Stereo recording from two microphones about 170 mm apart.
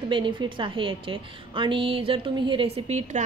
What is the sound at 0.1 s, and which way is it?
A woman's voice, 30° right (ahead or behind).